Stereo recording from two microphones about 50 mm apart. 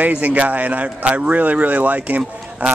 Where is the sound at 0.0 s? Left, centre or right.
Right.